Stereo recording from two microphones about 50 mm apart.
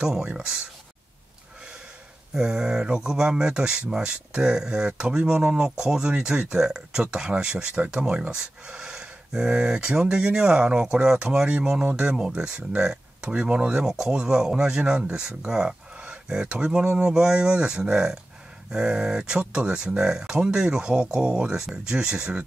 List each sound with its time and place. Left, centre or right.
0.0 s speech: centre
2.3 s speech: centre